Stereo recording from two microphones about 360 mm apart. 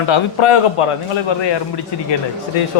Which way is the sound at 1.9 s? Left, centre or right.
Left.